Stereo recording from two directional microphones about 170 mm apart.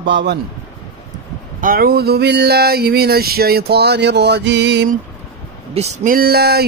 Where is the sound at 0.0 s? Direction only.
90° right.